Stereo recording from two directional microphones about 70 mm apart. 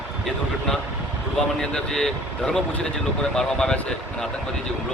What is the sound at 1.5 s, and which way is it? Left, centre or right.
Speech, centre.